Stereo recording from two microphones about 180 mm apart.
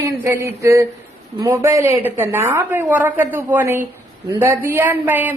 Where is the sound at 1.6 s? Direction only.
15° right (ahead or behind).